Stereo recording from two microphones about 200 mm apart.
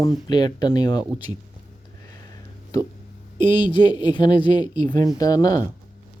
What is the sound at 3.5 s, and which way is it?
Speech, 25° left (ahead or behind).